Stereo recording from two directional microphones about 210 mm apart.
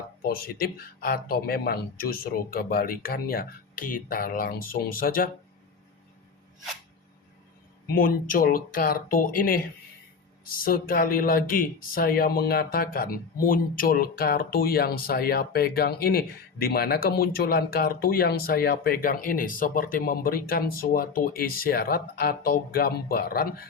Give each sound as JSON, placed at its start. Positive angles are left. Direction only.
{"t": 0.2, "sound": "speech", "side_deg": 45}
{"t": 7.9, "sound": "speech", "side_deg": 45}